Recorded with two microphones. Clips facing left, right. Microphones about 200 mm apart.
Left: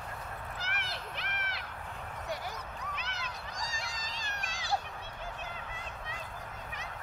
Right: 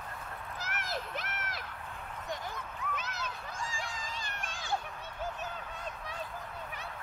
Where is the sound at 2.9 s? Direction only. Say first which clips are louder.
Right 3 dB; 45° right (ahead or behind).